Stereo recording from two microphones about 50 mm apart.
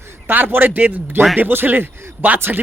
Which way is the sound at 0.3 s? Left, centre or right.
Right.